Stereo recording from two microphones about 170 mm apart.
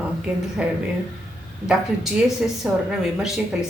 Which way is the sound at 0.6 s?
5° right (ahead or behind).